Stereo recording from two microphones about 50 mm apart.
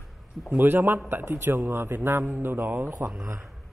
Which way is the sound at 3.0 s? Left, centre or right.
Right.